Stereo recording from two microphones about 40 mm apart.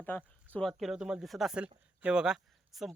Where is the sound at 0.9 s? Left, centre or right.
Centre.